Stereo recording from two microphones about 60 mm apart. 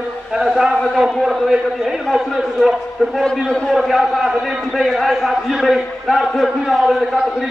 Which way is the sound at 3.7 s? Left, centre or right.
Centre.